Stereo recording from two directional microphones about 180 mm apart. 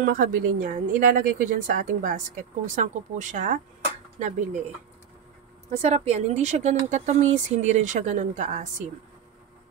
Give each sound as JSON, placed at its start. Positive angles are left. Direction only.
{"t": 0.0, "sound": "speech", "side_deg": -45}
{"t": 5.7, "sound": "speech", "side_deg": -40}